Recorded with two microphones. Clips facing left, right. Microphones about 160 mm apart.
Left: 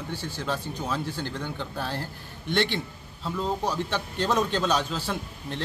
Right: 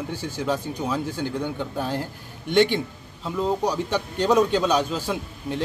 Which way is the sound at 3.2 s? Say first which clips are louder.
Right 4 dB; 15° right (ahead or behind).